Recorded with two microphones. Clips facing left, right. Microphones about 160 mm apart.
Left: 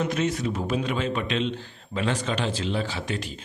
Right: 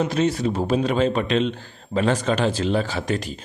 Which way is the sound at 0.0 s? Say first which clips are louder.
Right 4 dB; 30° right (ahead or behind).